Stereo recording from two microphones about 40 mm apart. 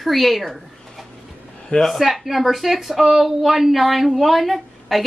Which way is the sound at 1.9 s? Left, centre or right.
Centre.